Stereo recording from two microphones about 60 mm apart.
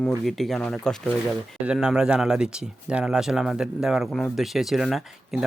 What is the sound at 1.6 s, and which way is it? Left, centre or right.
Speech, centre.